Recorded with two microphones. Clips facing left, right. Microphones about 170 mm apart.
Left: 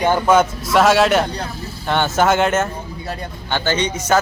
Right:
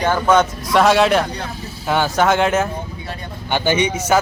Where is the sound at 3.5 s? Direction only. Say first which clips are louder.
Right 2 dB; 15° right (ahead or behind).